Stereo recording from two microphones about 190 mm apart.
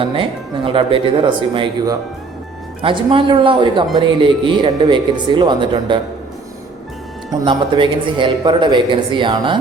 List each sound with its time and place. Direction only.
0.0 s speech: 25° right (ahead or behind)
7.3 s speech: 25° right (ahead or behind)